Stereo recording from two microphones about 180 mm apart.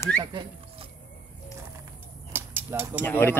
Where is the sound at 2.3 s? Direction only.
10° right (ahead or behind).